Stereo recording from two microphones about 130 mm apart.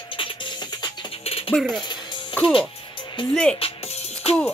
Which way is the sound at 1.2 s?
45° left (ahead or behind).